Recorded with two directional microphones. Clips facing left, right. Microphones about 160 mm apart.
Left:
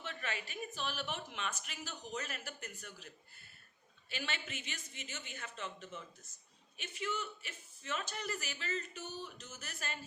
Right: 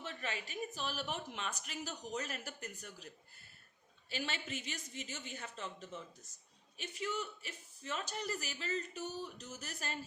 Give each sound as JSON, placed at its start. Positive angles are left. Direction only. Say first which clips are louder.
{"t": 0.0, "sound": "speech", "louder": "even", "side_deg": -35}
{"t": 4.1, "sound": "speech", "louder": "right 2 dB", "side_deg": -35}